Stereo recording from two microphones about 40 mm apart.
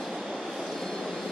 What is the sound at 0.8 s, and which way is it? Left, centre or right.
Vehicle, centre.